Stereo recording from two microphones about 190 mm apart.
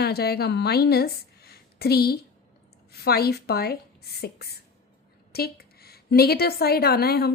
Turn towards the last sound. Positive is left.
turn(degrees=55)  # may be behind; listen again after turning